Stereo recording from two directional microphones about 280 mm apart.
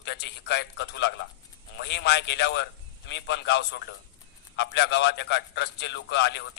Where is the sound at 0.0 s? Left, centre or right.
Left.